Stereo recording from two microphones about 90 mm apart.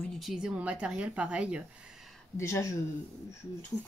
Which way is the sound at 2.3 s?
35° left (ahead or behind).